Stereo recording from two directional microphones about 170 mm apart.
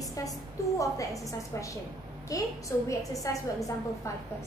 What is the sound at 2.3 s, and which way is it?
A woman's voice, 20° left (ahead or behind).